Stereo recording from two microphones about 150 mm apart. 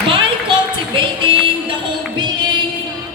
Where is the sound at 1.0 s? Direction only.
35° right (ahead or behind).